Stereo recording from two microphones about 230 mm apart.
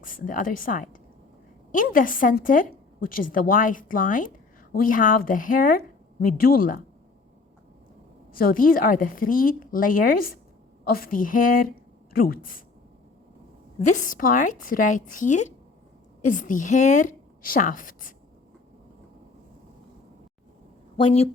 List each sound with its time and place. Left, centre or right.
0.0 s a woman's voice: left
8.3 s a woman's voice: left
13.7 s a woman's voice: left
20.9 s speech: left